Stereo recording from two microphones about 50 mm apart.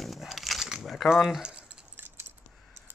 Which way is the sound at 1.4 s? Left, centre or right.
Right.